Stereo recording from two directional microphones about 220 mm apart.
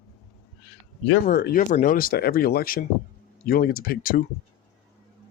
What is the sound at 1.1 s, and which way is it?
Speech, 50° left (ahead or behind).